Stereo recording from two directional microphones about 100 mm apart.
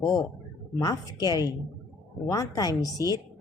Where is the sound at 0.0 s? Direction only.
40° left (ahead or behind).